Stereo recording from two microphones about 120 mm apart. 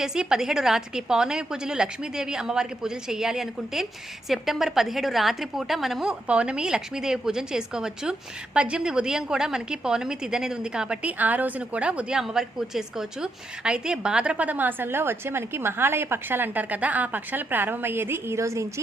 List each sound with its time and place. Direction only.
0.0 s a woman's voice: 5° right (ahead or behind); by 18.6 s 25° right (ahead or behind)